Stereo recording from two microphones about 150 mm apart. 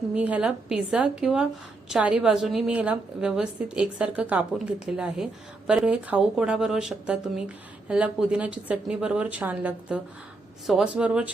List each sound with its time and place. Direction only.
0.1 s a woman's voice: 10° right (ahead or behind)